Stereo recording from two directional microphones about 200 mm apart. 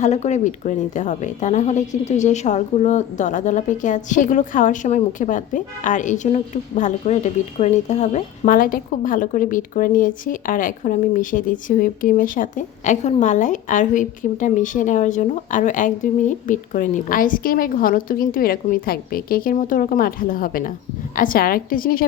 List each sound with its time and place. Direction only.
0.0 s a woman's voice: 35° left (ahead or behind)